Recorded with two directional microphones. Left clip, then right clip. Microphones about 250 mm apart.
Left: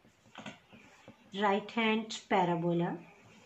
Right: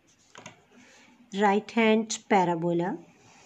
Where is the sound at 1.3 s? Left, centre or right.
Right.